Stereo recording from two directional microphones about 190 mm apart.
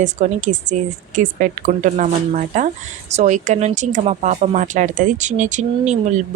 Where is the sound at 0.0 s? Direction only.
40° right (ahead or behind).